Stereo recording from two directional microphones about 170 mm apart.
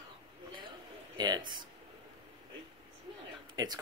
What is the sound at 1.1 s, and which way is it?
Speech, 25° right (ahead or behind).